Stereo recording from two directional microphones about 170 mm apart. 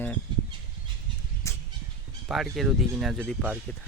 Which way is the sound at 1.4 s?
15° left (ahead or behind).